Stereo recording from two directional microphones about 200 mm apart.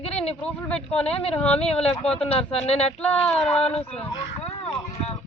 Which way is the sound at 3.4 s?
30° left (ahead or behind).